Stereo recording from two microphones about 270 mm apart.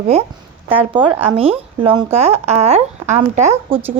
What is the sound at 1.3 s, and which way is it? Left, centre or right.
A woman's voice, right.